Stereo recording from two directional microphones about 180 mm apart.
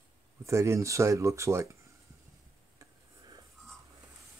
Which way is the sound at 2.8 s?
20° right (ahead or behind).